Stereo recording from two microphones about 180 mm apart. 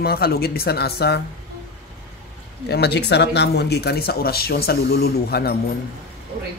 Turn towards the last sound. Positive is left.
turn(degrees=60)  # may be behind; listen again after turning